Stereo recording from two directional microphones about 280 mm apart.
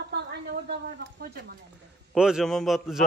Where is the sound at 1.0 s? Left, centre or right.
Right.